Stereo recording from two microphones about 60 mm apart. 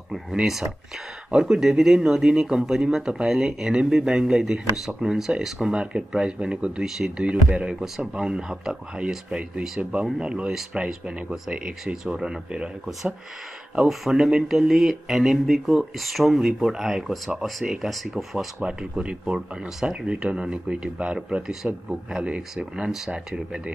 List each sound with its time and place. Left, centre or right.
0.1 s speech: centre